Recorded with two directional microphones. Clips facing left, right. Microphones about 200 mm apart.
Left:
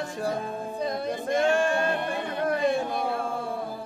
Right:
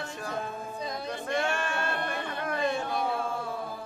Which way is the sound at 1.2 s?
15° left (ahead or behind).